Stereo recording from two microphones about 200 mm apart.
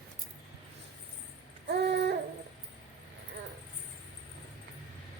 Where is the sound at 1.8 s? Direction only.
60° right (ahead or behind).